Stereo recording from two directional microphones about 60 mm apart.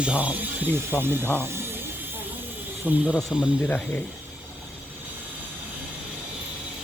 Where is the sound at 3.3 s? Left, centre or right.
Centre.